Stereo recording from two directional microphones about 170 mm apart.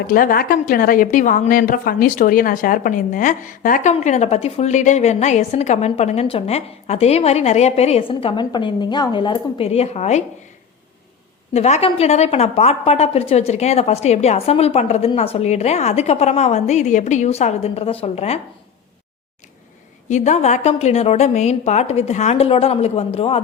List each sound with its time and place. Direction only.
0.1 s a woman's voice: 60° left (ahead or behind); by 10.2 s 40° left (ahead or behind)
11.5 s a woman's voice: 40° left (ahead or behind)
20.1 s a woman's voice: 45° left (ahead or behind)